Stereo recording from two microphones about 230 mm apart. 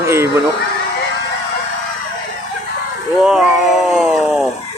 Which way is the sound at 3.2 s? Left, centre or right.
Centre.